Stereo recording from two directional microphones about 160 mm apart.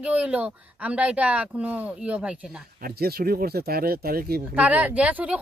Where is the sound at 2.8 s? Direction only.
70° right (ahead or behind).